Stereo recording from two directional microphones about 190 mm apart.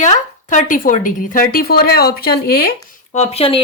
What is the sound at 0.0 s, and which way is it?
A woman's voice, 40° left (ahead or behind).